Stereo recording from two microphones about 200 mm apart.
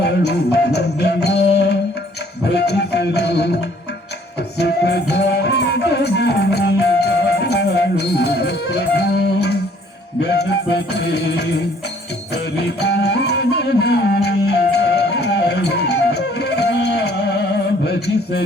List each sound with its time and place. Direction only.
0.0 s music: 55° left (ahead or behind)
4.5 s music: 55° left (ahead or behind)
17.8 s a sound: 55° left (ahead or behind)